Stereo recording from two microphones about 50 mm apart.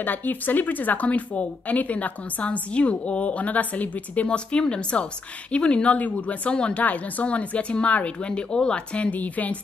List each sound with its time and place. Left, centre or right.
0.0 s a woman's voice: left